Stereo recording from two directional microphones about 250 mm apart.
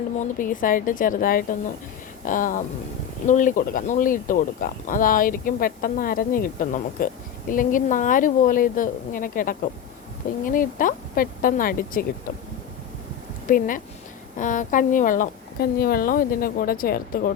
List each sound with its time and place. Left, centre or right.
0.2 s speech: left
13.5 s speech: left